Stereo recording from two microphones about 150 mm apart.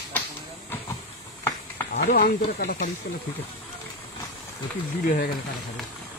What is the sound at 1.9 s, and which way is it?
Speech, 90° left.